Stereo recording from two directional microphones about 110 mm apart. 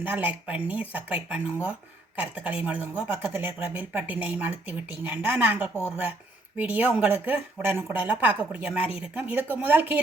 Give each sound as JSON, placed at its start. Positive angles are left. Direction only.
{"t": 0.0, "sound": "speech", "side_deg": -15}